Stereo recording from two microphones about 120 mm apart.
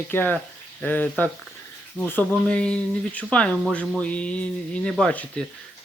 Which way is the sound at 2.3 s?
10° left (ahead or behind).